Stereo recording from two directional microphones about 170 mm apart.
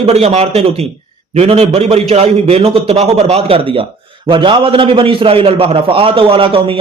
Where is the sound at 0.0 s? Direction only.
40° right (ahead or behind).